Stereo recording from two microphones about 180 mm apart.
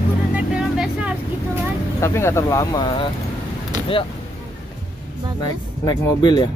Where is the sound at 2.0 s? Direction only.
15° left (ahead or behind).